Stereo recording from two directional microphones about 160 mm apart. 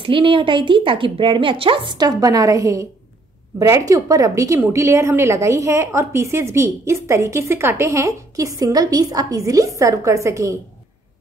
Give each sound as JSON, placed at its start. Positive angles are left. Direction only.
{"t": 0.0, "sound": "a woman's voice", "side_deg": -35}